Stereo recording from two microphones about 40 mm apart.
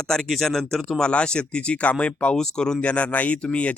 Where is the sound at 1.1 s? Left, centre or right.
Left.